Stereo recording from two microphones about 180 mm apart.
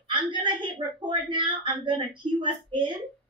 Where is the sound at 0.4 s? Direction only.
25° right (ahead or behind).